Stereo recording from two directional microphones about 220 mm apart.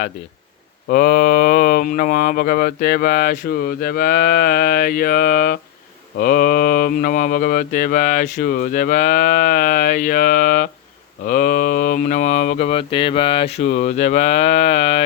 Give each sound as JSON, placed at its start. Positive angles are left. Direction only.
{"t": 0.9, "sound": "speech", "side_deg": 40}